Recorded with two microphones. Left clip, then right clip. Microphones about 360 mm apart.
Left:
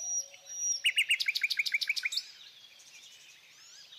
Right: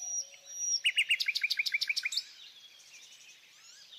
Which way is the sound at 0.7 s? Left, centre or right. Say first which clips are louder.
Even; left.